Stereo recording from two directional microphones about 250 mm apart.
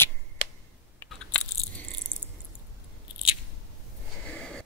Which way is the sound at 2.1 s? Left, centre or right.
Centre.